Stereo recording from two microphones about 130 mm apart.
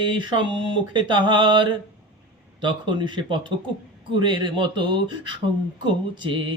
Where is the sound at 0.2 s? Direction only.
40° right (ahead or behind).